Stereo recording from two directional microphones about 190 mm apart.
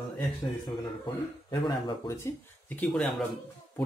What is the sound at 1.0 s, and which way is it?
Speech, 25° left (ahead or behind).